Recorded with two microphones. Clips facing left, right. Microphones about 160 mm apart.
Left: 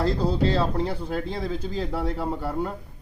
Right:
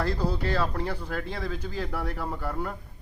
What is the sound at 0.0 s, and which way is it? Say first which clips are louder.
Speech: left 5 dB; 25° left (ahead or behind).